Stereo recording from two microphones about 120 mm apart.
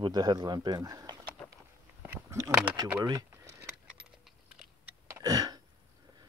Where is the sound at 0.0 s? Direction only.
35° right (ahead or behind).